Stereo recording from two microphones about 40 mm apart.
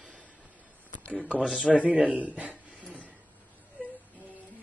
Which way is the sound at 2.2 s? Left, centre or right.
Right.